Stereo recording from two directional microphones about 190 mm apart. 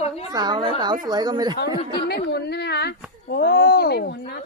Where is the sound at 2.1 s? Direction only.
60° left (ahead or behind).